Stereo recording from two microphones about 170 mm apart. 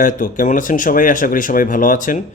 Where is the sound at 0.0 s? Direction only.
50° left (ahead or behind).